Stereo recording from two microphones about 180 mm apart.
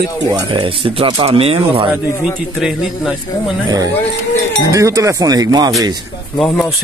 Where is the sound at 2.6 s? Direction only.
Centre (ahead or behind).